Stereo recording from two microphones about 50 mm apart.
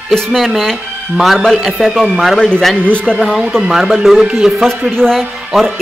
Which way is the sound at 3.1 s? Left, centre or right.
Centre.